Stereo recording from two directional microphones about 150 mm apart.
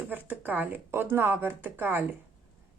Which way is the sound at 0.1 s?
10° right (ahead or behind).